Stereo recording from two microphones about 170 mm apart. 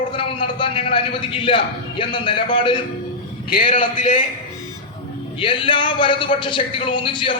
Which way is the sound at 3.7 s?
50° left (ahead or behind).